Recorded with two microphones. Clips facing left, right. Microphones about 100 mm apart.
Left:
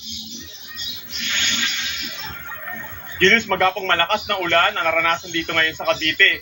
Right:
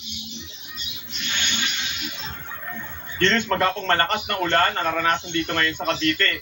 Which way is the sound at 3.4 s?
25° right (ahead or behind).